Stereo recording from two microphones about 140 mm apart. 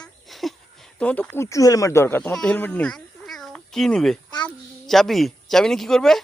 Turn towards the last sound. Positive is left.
turn(degrees=5)  # may be behind; listen again after turning